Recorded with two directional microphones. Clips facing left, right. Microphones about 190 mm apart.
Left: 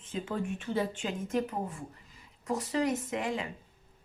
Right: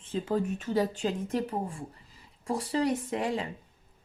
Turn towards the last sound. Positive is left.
turn(degrees=-35)  # may be behind; listen again after turning